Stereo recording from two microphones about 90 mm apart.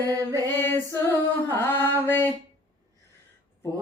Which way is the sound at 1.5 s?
25° left (ahead or behind).